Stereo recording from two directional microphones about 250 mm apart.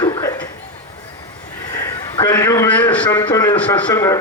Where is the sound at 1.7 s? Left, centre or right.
Centre.